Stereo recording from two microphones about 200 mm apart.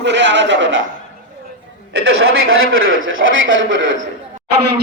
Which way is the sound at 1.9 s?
90° right.